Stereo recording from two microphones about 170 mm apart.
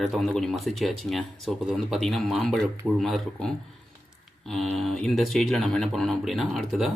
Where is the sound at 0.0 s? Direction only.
Centre (ahead or behind).